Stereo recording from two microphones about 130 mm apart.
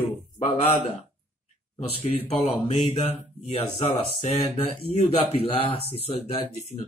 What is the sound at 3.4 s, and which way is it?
Speech, 50° left (ahead or behind).